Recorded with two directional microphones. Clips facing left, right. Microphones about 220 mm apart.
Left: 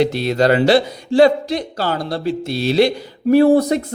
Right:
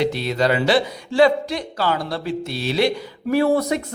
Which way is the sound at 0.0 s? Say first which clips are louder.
Left 4 dB; 45° left (ahead or behind).